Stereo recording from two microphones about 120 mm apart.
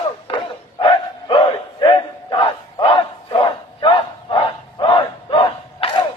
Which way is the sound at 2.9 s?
45° left (ahead or behind).